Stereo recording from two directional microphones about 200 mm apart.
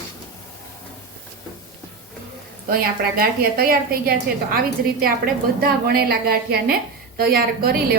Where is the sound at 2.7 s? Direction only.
50° right (ahead or behind).